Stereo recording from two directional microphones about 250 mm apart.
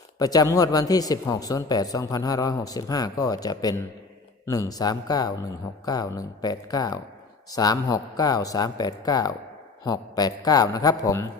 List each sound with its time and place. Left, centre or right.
0.2 s speech: centre